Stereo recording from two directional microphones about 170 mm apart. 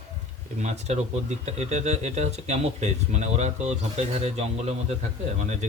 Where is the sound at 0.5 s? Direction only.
40° right (ahead or behind).